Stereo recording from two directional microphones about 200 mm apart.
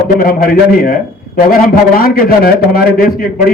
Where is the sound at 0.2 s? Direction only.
45° left (ahead or behind).